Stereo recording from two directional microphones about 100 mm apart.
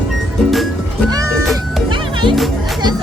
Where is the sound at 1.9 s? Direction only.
55° right (ahead or behind).